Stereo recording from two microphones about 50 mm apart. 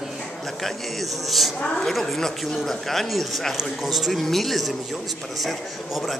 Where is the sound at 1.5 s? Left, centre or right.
Left.